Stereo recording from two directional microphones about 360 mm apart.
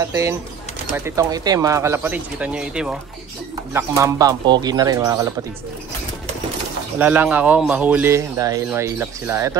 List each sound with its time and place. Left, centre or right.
0.1 s speech: centre
7.0 s speech: centre